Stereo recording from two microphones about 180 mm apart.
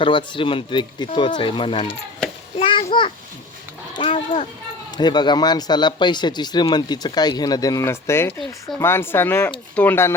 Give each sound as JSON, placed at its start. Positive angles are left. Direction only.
{"t": 0.0, "sound": "speech", "side_deg": 25}
{"t": 2.6, "sound": "a sound", "side_deg": 30}
{"t": 4.9, "sound": "speech", "side_deg": 25}